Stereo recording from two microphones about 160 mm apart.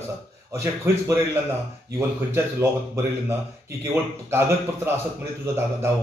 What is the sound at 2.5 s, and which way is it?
Speech, 15° right (ahead or behind).